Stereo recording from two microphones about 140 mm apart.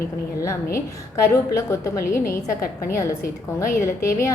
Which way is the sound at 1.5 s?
25° left (ahead or behind).